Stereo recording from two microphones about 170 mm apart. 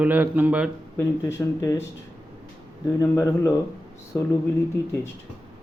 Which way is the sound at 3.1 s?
20° left (ahead or behind).